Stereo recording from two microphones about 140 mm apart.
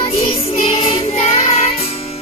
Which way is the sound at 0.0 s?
45° left (ahead or behind).